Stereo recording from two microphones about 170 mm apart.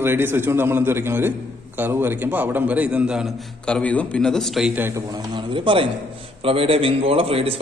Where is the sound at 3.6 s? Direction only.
5° left (ahead or behind); by 5.0 s 10° right (ahead or behind).